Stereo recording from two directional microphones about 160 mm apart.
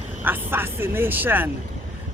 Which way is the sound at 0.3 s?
15° right (ahead or behind).